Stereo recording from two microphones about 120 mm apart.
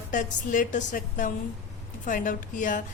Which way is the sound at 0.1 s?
90° left.